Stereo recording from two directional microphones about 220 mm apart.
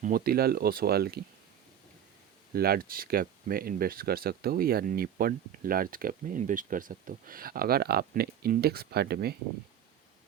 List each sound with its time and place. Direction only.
0.0 s speech: 40° right (ahead or behind)
2.6 s speech: 45° right (ahead or behind)